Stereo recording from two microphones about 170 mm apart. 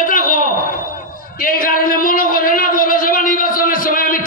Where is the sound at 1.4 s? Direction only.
55° left (ahead or behind).